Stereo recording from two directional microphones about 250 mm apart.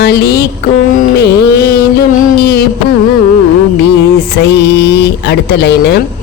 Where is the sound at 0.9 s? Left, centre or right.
Left.